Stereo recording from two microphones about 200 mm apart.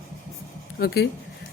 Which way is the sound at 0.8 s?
50° left (ahead or behind).